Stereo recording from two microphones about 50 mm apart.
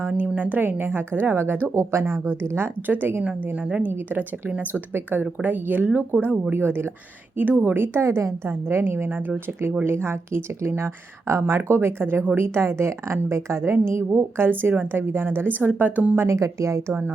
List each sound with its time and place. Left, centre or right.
0.1 s a woman's voice: right
1.7 s speech: right
2.6 s a woman's voice: right
3.4 s a woman's voice: right
3.9 s a woman's voice: right
6.5 s a woman's voice: right
7.3 s a woman's voice: right
8.0 s a woman's voice: right
8.4 s a woman's voice: right
9.8 s speech: right
10.8 s speech: right
11.5 s a woman's voice: right
14.6 s a woman's voice: right
16.1 s speech: right